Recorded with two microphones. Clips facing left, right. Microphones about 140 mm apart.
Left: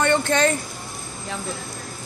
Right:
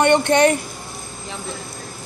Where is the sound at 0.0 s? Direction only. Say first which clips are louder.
Right 5 dB; 20° right (ahead or behind).